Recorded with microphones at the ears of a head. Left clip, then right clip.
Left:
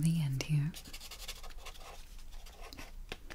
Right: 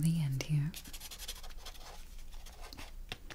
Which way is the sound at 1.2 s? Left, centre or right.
Centre.